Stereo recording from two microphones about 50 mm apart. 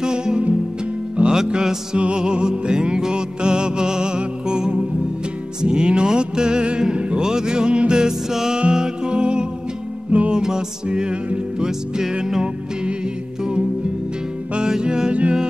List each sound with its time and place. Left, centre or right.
0.0 s music: centre